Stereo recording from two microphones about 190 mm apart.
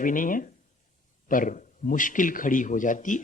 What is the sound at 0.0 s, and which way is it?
A man's voice, 45° left (ahead or behind).